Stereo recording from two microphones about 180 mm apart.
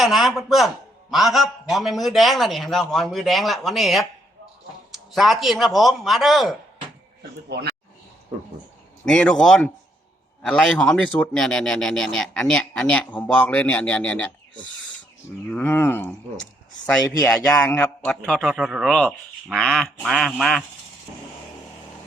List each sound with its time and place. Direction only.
0.0 s speech: centre (ahead or behind)
7.2 s speech: 65° right (ahead or behind)
9.0 s speech: 5° left (ahead or behind)
15.4 s speech: 10° left (ahead or behind)
17.2 s speech: 20° left (ahead or behind)
17.6 s speech: 5° left (ahead or behind)